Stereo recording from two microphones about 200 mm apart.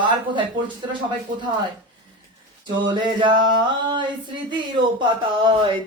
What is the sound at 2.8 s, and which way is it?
Speech, 25° right (ahead or behind).